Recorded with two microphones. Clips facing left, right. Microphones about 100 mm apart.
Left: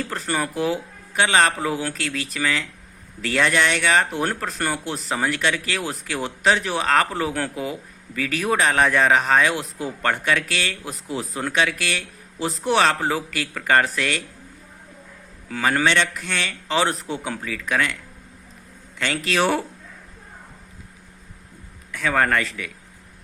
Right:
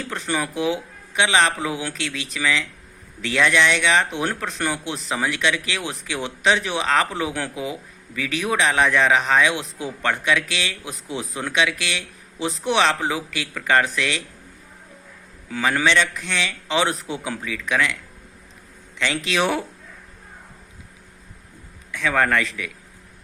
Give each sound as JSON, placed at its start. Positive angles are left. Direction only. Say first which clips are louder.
{"t": 0.1, "sound": "speech", "louder": "even", "side_deg": 40}
{"t": 15.4, "sound": "speech", "louder": "even", "side_deg": 40}
{"t": 18.9, "sound": "speech", "louder": "even", "side_deg": 40}
{"t": 21.9, "sound": "speech", "louder": "even", "side_deg": 35}